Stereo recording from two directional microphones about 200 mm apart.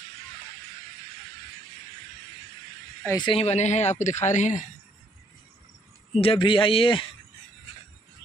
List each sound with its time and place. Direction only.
3.2 s speech: 25° left (ahead or behind)
6.2 s a man's voice: 25° left (ahead or behind)